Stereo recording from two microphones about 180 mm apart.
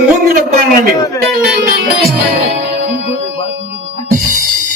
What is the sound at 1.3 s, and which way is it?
Music, 55° right (ahead or behind).